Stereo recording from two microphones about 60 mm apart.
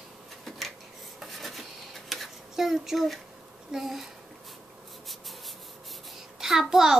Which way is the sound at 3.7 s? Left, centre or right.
Centre.